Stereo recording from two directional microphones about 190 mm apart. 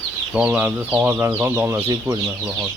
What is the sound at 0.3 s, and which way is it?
Speech, 5° right (ahead or behind).